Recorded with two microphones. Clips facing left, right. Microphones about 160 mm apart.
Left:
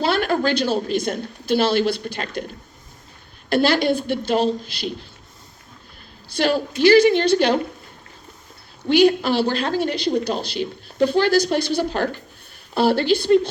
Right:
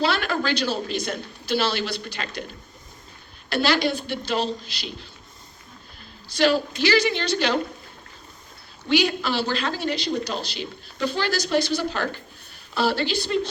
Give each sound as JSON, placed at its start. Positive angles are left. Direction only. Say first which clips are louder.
{"t": 0.0, "sound": "a woman's voice", "louder": "left 4 dB", "side_deg": 50}
{"t": 3.5, "sound": "a woman's voice", "louder": "left 4 dB", "side_deg": 55}
{"t": 6.2, "sound": "a woman's voice", "louder": "even", "side_deg": 55}
{"t": 8.9, "sound": "speech", "louder": "left 7 dB", "side_deg": 55}